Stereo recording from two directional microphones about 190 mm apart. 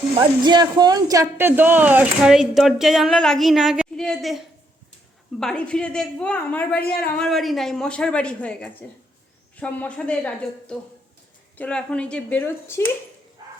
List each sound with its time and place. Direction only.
0.1 s a woman's voice: 25° right (ahead or behind); by 12.8 s 10° left (ahead or behind)